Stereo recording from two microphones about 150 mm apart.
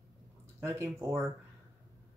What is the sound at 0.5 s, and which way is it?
Speech, 15° right (ahead or behind).